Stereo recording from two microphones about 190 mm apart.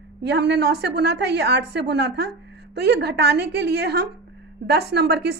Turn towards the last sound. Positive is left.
turn(degrees=-60)  # may be behind; listen again after turning